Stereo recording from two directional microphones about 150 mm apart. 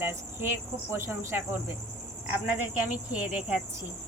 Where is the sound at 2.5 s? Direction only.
10° right (ahead or behind).